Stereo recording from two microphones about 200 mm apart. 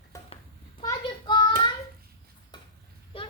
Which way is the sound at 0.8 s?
20° left (ahead or behind).